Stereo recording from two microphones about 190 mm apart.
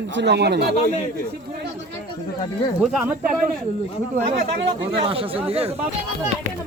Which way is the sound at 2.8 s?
Centre (ahead or behind).